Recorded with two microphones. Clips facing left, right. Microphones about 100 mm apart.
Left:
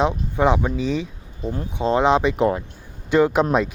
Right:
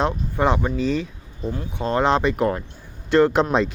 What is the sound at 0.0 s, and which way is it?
Speech, 10° left (ahead or behind).